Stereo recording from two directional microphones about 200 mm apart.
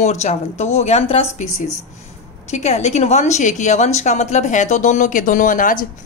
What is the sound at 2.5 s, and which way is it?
A woman's voice, 35° left (ahead or behind).